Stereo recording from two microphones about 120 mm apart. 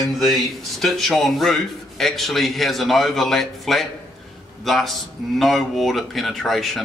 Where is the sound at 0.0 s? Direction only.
Centre (ahead or behind).